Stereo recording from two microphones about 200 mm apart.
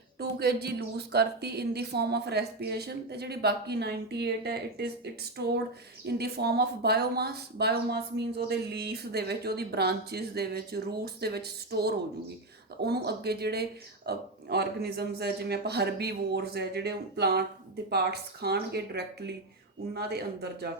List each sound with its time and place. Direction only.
0.2 s a woman's voice: 55° right (ahead or behind)